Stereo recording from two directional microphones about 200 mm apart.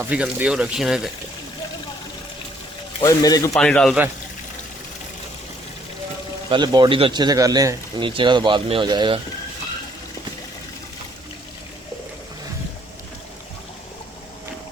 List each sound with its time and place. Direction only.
0.0 s speech: 10° right (ahead or behind)
3.0 s speech: 15° left (ahead or behind)
3.5 s speech: 5° left (ahead or behind)
6.5 s a man's voice: 20° right (ahead or behind)